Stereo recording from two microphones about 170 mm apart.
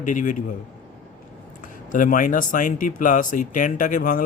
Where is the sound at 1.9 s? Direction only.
50° left (ahead or behind).